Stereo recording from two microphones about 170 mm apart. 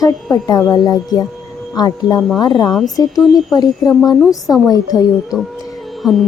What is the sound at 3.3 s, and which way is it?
A woman's voice, 20° left (ahead or behind).